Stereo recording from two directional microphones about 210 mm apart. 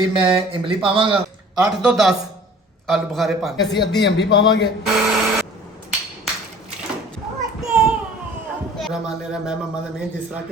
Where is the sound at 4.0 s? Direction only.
55° left (ahead or behind).